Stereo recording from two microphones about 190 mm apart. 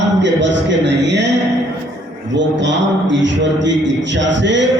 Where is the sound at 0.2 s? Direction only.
70° right (ahead or behind).